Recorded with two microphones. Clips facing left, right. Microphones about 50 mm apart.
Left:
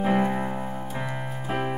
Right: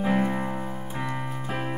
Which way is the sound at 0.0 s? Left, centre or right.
Centre.